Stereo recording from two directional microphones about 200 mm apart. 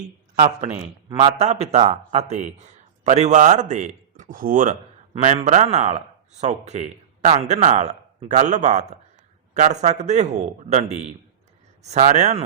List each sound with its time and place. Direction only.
0.3 s speech: 35° right (ahead or behind)